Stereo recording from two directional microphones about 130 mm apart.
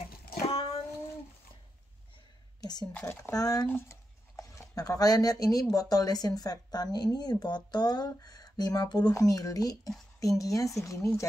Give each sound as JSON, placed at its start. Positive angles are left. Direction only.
{"t": 0.5, "sound": "a sound", "side_deg": 50}
{"t": 2.6, "sound": "a woman's voice", "side_deg": 30}
{"t": 2.9, "sound": "speech", "side_deg": 10}
{"t": 3.2, "sound": "speech", "side_deg": 25}